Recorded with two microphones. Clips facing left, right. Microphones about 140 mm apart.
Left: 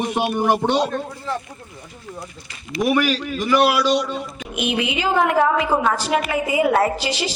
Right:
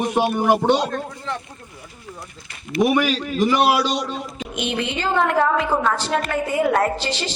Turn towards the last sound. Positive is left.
turn(degrees=10)  # may be behind; listen again after turning